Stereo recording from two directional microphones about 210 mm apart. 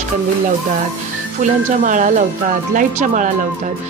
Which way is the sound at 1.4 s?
35° right (ahead or behind).